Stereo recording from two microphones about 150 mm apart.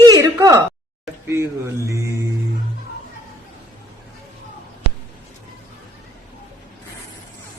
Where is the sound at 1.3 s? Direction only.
15° right (ahead or behind).